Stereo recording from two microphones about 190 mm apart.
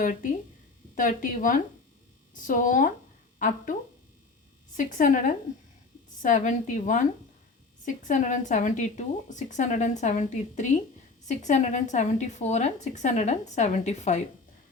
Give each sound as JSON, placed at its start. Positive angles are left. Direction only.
{"t": 0.0, "sound": "a woman's voice", "side_deg": 45}
{"t": 4.8, "sound": "a woman's voice", "side_deg": 45}